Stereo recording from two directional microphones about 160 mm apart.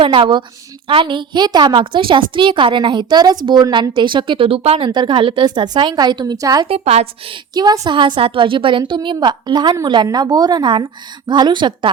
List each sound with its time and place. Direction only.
0.0 s a woman's voice: 30° right (ahead or behind)
6.7 s a woman's voice: 40° right (ahead or behind)
7.5 s a woman's voice: 25° right (ahead or behind)